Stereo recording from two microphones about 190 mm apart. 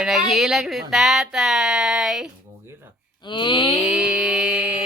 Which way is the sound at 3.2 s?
25° left (ahead or behind).